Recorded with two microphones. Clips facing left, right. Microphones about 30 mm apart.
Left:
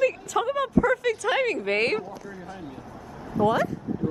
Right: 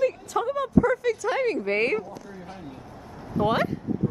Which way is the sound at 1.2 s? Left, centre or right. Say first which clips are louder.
Left 2 dB; left.